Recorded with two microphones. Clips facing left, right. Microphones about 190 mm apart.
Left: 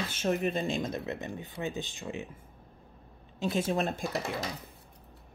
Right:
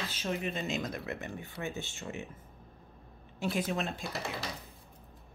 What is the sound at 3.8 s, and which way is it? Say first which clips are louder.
Speech: left 5 dB; 45° left (ahead or behind).